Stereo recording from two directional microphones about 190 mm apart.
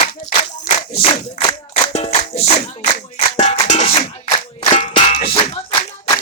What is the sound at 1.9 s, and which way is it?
Music, 35° left (ahead or behind).